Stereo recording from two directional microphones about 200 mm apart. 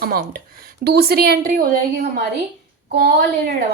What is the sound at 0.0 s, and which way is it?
A woman's voice, 50° right (ahead or behind).